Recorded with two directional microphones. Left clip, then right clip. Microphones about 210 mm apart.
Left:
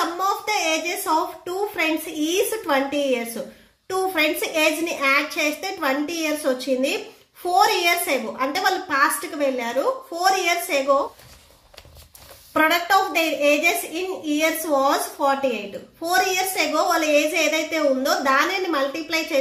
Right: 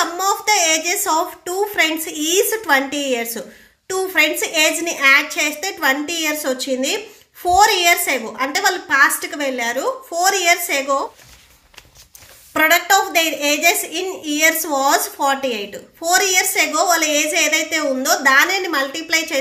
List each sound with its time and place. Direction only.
0.2 s a woman's voice: 25° right (ahead or behind)
12.5 s a woman's voice: 20° right (ahead or behind)